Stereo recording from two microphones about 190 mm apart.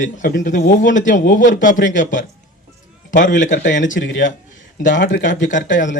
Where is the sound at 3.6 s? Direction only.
70° left (ahead or behind).